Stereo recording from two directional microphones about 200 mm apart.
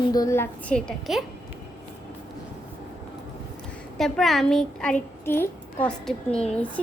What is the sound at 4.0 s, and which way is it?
A child's voice, centre (ahead or behind).